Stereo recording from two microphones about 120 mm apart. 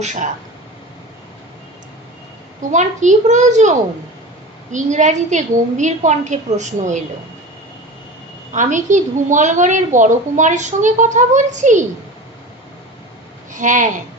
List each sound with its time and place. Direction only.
0.0 s a woman's voice: 90° right
2.7 s a child's voice: 90° right
8.5 s a woman's voice: 90° right
13.5 s speech: 90° right